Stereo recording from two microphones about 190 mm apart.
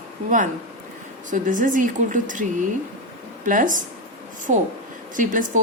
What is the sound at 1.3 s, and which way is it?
Speech, 45° right (ahead or behind).